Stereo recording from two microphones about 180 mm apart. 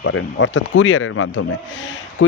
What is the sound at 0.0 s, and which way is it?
Speech, 90° left.